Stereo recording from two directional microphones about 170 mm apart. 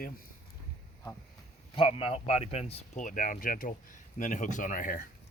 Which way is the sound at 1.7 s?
30° left (ahead or behind).